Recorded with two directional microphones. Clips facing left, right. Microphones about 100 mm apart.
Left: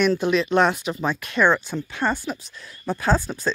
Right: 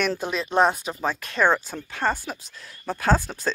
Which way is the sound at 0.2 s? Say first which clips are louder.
Left 2 dB; 40° right (ahead or behind).